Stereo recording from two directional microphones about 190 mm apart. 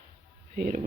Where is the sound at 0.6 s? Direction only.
45° right (ahead or behind).